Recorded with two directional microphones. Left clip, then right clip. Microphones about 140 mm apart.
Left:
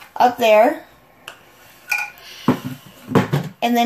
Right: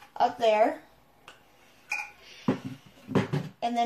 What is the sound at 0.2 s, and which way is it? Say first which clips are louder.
Speech: left 10 dB; 45° left (ahead or behind).